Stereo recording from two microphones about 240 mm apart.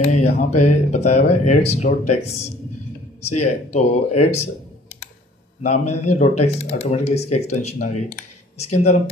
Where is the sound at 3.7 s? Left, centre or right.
Left.